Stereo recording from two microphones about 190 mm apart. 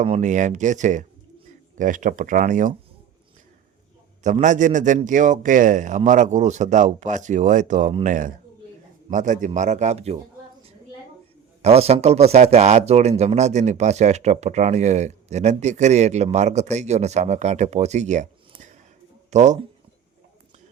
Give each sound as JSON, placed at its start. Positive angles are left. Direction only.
{"t": 0.0, "sound": "speech", "side_deg": -35}
{"t": 4.2, "sound": "speech", "side_deg": -40}
{"t": 11.6, "sound": "speech", "side_deg": -35}
{"t": 19.3, "sound": "speech", "side_deg": -40}